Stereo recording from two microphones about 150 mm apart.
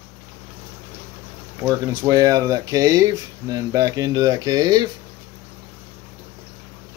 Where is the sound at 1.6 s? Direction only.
20° right (ahead or behind).